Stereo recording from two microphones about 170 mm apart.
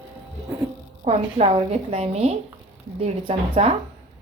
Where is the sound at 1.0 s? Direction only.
40° right (ahead or behind).